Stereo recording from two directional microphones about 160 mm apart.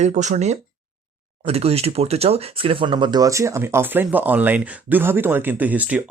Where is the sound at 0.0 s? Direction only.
45° right (ahead or behind).